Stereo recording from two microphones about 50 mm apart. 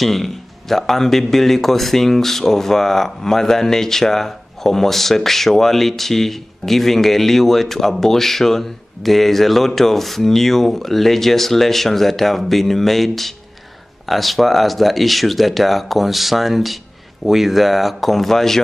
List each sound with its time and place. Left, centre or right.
0.0 s speech: centre